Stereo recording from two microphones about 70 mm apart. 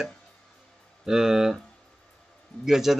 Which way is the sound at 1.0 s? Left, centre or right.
Centre.